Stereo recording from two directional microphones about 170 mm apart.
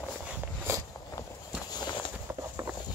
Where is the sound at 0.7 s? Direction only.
15° right (ahead or behind).